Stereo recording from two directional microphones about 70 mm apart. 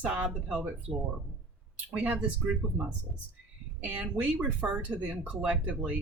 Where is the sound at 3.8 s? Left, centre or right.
Centre.